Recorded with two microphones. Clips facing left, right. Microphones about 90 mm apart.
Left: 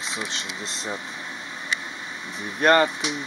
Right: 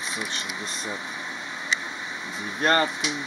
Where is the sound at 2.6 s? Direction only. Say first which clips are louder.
Left 4 dB; 80° left.